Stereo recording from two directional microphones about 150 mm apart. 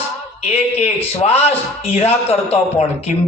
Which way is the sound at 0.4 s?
45° left (ahead or behind).